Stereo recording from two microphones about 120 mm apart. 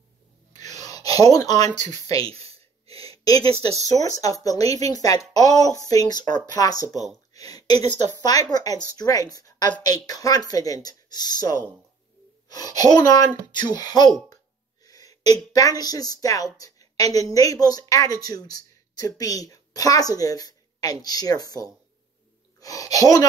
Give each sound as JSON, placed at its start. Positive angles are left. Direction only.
{"t": 0.5, "sound": "gasp", "side_deg": 30}
{"t": 2.0, "sound": "a woman's voice", "side_deg": 30}
{"t": 2.3, "sound": "a sound", "side_deg": -55}
{"t": 3.9, "sound": "a woman's voice", "side_deg": 30}
{"t": 12.4, "sound": "a sound", "side_deg": 35}
{"t": 12.9, "sound": "a woman's voice", "side_deg": 35}